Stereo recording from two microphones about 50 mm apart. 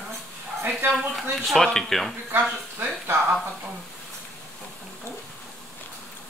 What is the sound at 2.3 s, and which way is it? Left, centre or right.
Speech, right.